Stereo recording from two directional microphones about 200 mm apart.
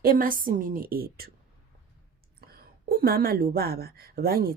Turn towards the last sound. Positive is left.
turn(degrees=-50)  # may be behind; listen again after turning